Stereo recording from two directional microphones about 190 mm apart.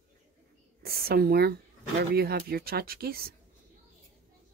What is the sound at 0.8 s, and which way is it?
Speech, 55° right (ahead or behind).